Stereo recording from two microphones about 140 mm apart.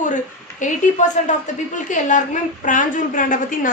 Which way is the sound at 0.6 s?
65° left (ahead or behind).